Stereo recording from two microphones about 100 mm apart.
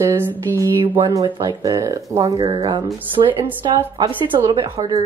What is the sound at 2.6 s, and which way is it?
Speech, 50° right (ahead or behind).